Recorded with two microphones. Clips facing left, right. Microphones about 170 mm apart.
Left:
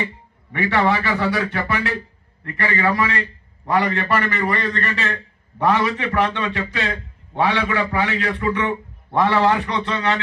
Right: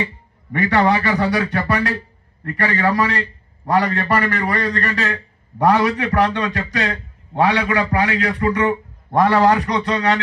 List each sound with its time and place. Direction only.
0.5 s a man's voice: 40° right (ahead or behind)